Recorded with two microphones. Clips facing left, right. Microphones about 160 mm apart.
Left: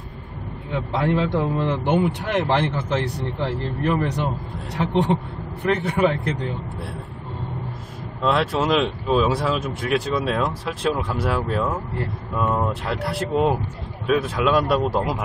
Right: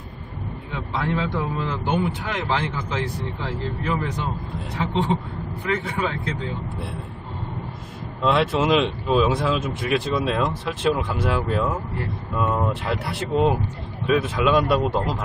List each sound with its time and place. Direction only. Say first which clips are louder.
1.2 s a man's voice: left 4 dB; 60° left (ahead or behind)
8.2 s speech: right 1 dB; centre (ahead or behind)